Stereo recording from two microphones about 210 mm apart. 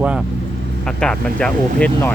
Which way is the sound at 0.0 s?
5° right (ahead or behind).